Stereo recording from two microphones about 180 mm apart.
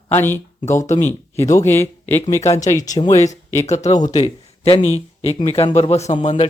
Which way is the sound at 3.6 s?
40° left (ahead or behind).